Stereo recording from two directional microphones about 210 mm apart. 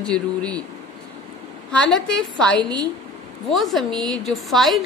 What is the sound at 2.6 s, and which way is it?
Speech, 20° right (ahead or behind).